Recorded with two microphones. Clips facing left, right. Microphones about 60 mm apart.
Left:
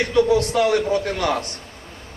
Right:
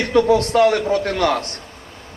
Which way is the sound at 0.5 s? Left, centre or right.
Right.